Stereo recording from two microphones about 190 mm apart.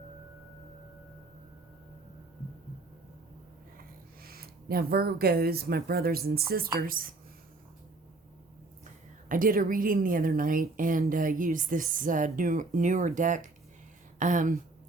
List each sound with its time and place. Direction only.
4.2 s a woman's voice: 50° right (ahead or behind)
9.3 s a woman's voice: 45° right (ahead or behind)